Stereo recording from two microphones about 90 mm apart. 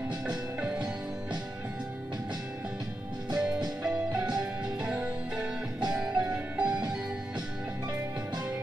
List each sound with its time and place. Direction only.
0.6 s music: 15° right (ahead or behind)
3.3 s music: 10° right (ahead or behind)